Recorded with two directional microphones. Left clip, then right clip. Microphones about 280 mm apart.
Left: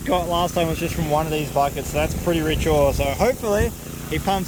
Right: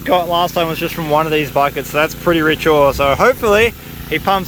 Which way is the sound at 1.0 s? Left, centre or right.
Right.